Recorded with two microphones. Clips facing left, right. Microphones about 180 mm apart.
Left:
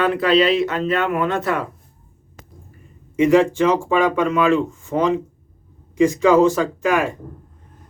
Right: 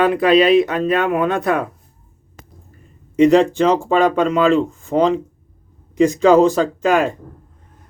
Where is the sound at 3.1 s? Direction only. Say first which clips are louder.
Right 3 dB; 20° right (ahead or behind).